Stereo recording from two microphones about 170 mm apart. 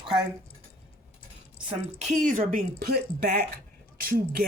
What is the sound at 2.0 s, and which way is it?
Speech, 50° right (ahead or behind).